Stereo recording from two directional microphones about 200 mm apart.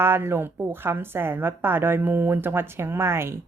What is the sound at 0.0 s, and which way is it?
A woman's voice, 10° right (ahead or behind).